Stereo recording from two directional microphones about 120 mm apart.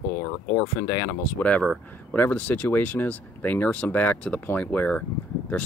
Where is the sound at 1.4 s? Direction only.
10° left (ahead or behind).